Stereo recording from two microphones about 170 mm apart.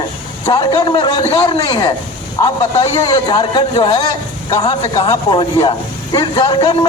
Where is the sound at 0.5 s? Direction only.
25° left (ahead or behind).